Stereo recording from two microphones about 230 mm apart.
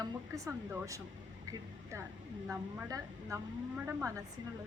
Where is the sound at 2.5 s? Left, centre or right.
Centre.